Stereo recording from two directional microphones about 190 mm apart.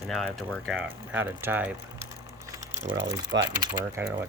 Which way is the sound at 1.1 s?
10° right (ahead or behind).